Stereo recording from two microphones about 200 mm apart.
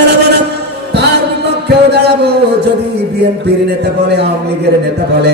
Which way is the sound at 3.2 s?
55° right (ahead or behind).